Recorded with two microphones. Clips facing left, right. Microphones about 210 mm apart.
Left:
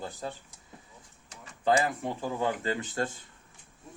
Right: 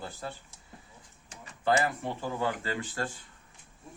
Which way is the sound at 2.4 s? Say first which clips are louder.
Left 3 dB; 20° left (ahead or behind).